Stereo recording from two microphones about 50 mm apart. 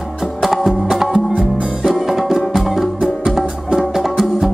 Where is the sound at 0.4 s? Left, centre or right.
Centre.